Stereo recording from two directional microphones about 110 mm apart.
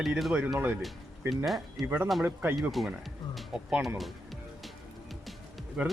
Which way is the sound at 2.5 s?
Centre (ahead or behind).